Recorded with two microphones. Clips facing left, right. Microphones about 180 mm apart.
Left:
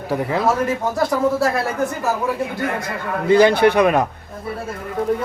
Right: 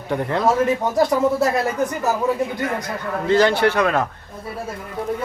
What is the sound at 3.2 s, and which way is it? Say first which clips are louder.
Speech: left 4 dB; 15° left (ahead or behind).